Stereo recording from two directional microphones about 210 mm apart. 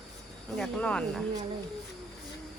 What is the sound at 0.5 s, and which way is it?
Speech, 5° left (ahead or behind).